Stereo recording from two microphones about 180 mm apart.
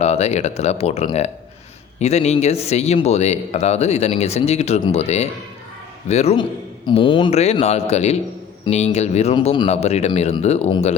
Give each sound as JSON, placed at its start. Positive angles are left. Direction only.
{"t": 0.0, "sound": "speech", "side_deg": 35}